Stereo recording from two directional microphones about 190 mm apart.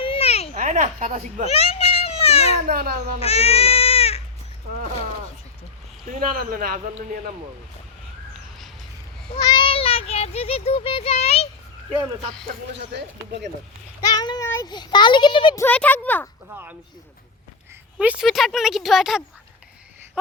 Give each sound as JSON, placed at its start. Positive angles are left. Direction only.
{"t": 0.0, "sound": "a sound", "side_deg": 30}
{"t": 0.5, "sound": "speech", "side_deg": -40}
{"t": 1.5, "sound": "children playing", "side_deg": 30}
{"t": 2.6, "sound": "speech", "side_deg": -50}
{"t": 3.2, "sound": "speech", "side_deg": 35}
{"t": 6.1, "sound": "speech", "side_deg": -45}
{"t": 9.5, "sound": "a child's voice", "side_deg": 25}
{"t": 12.7, "sound": "speech", "side_deg": -65}
{"t": 14.0, "sound": "a child's voice", "side_deg": 20}
{"t": 15.6, "sound": "speech", "side_deg": 10}
{"t": 16.5, "sound": "speech", "side_deg": -10}
{"t": 18.0, "sound": "speech", "side_deg": -5}